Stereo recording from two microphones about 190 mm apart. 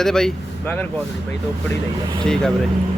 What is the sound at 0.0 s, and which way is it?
A man's voice, 5° left (ahead or behind).